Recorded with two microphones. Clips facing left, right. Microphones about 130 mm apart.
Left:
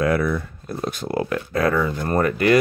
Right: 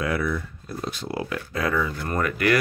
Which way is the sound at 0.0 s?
45° left (ahead or behind).